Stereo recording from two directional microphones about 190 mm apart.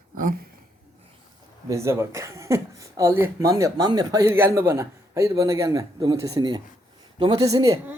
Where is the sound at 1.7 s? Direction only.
15° right (ahead or behind).